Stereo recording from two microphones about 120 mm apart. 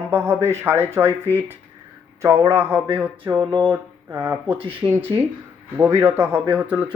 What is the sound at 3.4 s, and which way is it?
Speech, 35° right (ahead or behind).